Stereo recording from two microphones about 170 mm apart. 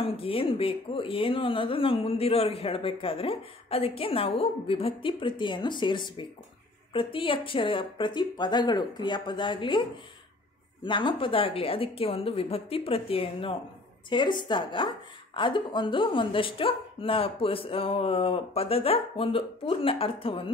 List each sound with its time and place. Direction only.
0.0 s speech: 35° left (ahead or behind)